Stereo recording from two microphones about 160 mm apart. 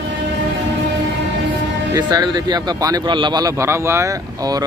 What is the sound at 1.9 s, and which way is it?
Speech, 25° right (ahead or behind).